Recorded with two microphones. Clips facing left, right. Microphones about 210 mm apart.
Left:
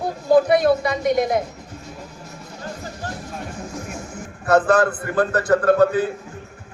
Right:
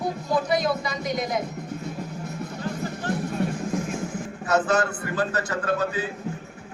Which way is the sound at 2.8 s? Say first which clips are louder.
Right 5 dB; 60° right (ahead or behind).